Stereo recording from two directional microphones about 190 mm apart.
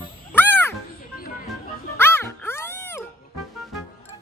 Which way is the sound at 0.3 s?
10° left (ahead or behind).